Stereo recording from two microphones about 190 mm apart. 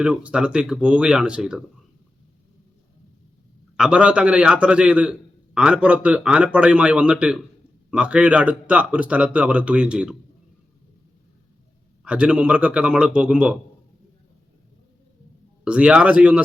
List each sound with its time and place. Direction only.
0.0 s speech: 5° right (ahead or behind)
3.8 s speech: 5° right (ahead or behind)
12.0 s speech: 5° right (ahead or behind)
15.6 s speech: 5° right (ahead or behind)